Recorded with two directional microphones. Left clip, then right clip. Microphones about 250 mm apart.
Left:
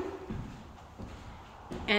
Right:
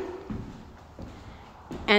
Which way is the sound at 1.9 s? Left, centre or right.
Centre.